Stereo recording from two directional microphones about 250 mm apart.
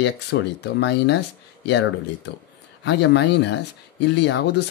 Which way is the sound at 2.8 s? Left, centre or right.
Left.